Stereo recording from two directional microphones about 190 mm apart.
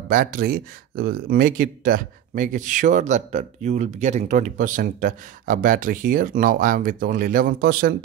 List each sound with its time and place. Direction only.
0.1 s speech: 45° right (ahead or behind)